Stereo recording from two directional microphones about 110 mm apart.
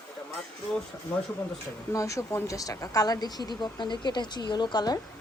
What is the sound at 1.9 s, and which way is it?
Speech, 30° left (ahead or behind).